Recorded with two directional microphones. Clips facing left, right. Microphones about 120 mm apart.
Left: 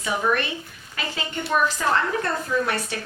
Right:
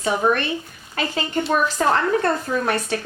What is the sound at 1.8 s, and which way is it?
Speech, 40° right (ahead or behind).